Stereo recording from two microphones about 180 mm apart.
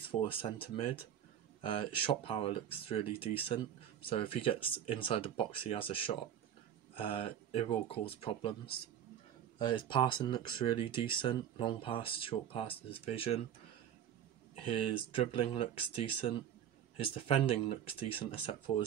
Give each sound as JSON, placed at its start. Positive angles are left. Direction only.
{"t": 0.1, "sound": "speech", "side_deg": 30}
{"t": 14.5, "sound": "speech", "side_deg": 30}
{"t": 17.0, "sound": "speech", "side_deg": 30}